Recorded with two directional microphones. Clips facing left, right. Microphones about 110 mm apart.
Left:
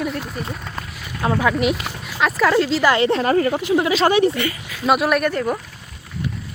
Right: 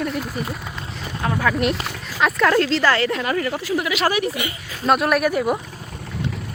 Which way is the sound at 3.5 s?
20° left (ahead or behind).